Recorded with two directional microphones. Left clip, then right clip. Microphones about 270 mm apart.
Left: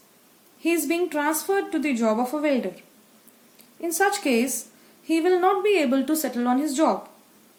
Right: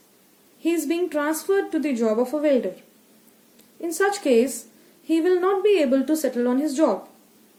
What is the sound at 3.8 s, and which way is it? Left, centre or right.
A woman's voice, centre.